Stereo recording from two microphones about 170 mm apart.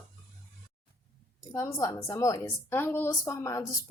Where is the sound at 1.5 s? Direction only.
20° left (ahead or behind).